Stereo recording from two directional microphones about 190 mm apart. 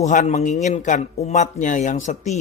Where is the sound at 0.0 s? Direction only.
40° left (ahead or behind).